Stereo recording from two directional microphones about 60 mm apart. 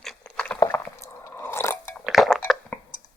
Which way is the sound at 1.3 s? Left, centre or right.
Left.